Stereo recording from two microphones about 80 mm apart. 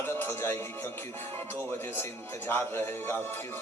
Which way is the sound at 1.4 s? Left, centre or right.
Left.